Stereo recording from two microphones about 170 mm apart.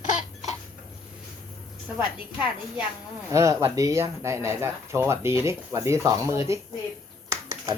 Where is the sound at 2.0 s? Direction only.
5° right (ahead or behind).